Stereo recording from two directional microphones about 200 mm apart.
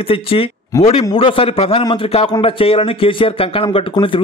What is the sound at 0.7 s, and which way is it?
Speech, 15° left (ahead or behind).